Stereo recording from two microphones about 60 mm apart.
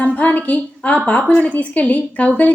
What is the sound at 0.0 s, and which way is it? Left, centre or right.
A woman's voice, left.